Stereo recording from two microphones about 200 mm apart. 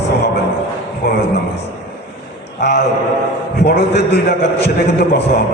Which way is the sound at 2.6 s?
55° left (ahead or behind).